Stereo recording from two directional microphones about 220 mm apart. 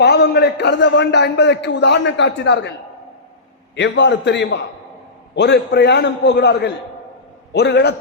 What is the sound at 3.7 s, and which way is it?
A man's voice, 55° left (ahead or behind).